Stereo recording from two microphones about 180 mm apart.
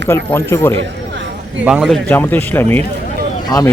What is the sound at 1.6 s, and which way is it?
Speech, 5° right (ahead or behind).